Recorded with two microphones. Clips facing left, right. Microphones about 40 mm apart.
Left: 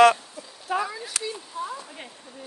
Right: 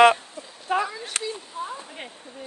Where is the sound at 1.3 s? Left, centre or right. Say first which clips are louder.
Even; right.